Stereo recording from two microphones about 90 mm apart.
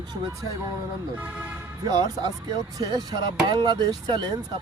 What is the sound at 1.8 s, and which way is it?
Speech, 45° right (ahead or behind).